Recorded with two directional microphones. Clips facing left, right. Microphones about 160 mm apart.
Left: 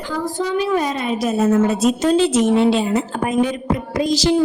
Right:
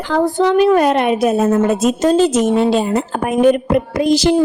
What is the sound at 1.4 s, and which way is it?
A woman's voice, 45° right (ahead or behind).